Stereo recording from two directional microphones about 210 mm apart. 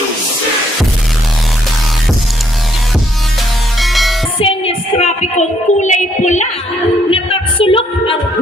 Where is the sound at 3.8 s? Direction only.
Centre (ahead or behind).